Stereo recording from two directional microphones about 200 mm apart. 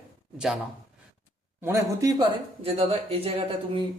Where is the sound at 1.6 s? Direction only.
15° right (ahead or behind).